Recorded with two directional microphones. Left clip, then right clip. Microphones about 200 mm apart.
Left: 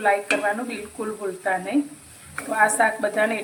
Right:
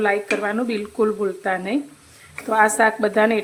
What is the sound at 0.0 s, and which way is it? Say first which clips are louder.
A woman's voice: even; 60° right (ahead or behind).